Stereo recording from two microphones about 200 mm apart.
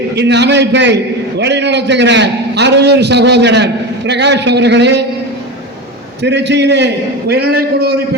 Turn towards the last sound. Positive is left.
turn(degrees=-50)  # may be behind; listen again after turning